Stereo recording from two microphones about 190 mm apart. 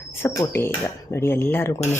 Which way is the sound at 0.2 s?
15° left (ahead or behind).